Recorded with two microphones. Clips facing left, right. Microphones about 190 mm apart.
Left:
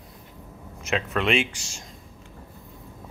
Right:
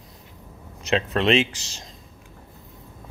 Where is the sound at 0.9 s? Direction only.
30° right (ahead or behind).